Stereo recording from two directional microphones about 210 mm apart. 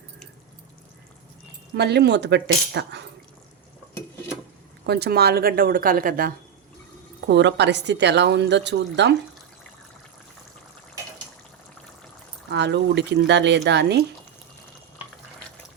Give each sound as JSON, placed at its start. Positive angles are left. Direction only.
{"t": 1.7, "sound": "a woman's voice", "side_deg": -50}
{"t": 4.9, "sound": "a woman's voice", "side_deg": -50}
{"t": 7.3, "sound": "a woman's voice", "side_deg": -55}
{"t": 12.5, "sound": "a woman's voice", "side_deg": -55}